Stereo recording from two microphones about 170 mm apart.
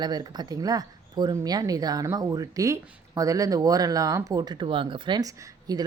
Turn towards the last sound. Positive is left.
turn(degrees=-20)  # may be behind; listen again after turning